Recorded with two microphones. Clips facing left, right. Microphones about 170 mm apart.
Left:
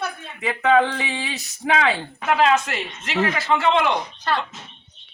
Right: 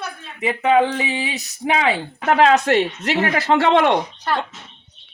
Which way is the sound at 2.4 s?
35° right (ahead or behind).